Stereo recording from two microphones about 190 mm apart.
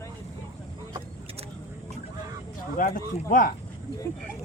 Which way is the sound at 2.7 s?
45° left (ahead or behind).